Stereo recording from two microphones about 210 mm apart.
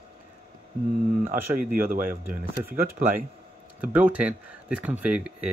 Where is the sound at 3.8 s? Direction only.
5° right (ahead or behind).